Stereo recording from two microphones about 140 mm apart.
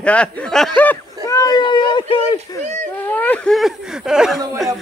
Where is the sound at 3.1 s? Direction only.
10° left (ahead or behind); by 4.4 s 5° right (ahead or behind).